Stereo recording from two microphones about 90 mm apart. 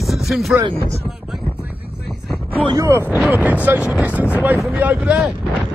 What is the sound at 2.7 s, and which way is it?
Speech, 35° right (ahead or behind).